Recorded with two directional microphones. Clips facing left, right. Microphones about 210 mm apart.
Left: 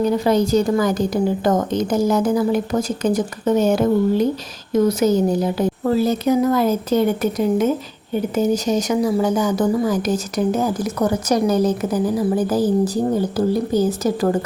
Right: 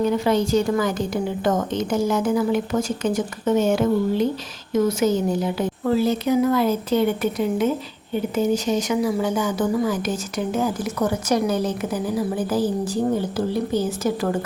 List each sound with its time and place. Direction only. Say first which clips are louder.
0.0 s a woman's voice: left 3 dB; 40° left (ahead or behind)